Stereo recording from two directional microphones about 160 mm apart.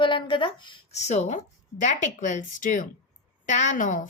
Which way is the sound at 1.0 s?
45° left (ahead or behind).